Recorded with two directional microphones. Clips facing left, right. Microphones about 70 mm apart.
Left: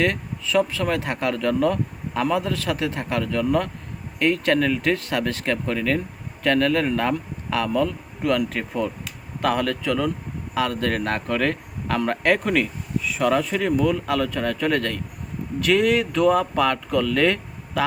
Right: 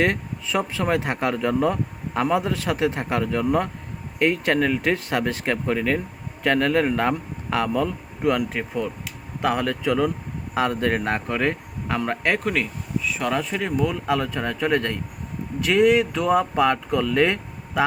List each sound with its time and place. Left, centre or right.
0.0 s speech: right